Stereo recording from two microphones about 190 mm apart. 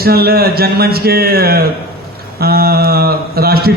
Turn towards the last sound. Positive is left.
turn(degrees=-55)  # may be behind; listen again after turning